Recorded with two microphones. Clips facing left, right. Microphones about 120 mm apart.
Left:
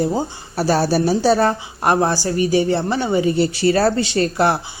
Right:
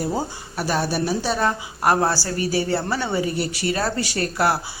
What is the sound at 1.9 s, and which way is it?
A woman's voice, 20° left (ahead or behind).